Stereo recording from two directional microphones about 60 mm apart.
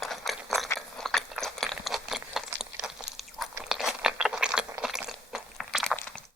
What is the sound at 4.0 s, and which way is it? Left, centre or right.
Ratchet, centre.